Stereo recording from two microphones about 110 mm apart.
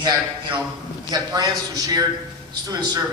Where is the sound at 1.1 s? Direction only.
35° right (ahead or behind).